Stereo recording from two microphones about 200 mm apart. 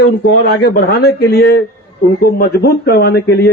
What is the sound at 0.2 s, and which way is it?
A man's voice, 55° left (ahead or behind).